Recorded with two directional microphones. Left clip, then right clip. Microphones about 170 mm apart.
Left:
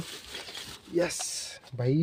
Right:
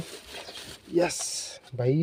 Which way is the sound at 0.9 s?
15° right (ahead or behind).